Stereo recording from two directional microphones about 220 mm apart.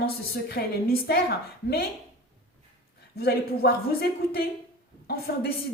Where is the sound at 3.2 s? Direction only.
45° left (ahead or behind).